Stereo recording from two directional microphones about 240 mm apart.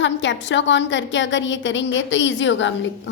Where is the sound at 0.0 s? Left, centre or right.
Left.